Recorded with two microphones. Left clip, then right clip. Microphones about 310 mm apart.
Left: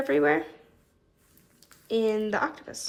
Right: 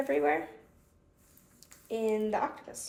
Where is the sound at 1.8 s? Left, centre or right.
Left.